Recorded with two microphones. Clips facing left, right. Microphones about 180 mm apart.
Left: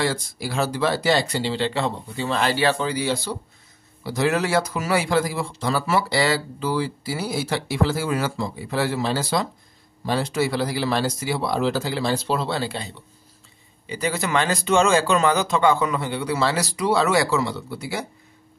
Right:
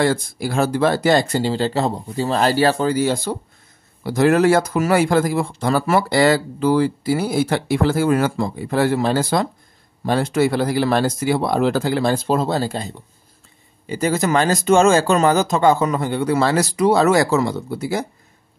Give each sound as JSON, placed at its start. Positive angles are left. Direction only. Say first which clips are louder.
{"t": 0.0, "sound": "speech", "louder": "right 6 dB", "side_deg": -50}